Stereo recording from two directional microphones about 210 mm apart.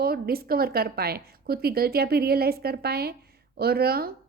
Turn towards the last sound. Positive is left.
turn(degrees=-45)  # may be behind; listen again after turning